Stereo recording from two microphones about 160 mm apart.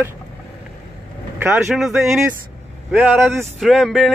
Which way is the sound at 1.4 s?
5° right (ahead or behind).